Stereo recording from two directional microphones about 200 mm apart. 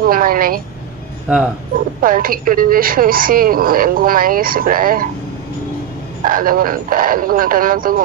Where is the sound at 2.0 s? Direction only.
45° right (ahead or behind).